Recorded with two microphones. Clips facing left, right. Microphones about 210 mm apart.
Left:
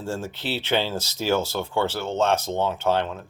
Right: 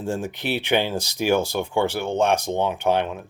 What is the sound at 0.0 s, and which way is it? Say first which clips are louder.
Speech: right 3 dB; 15° right (ahead or behind).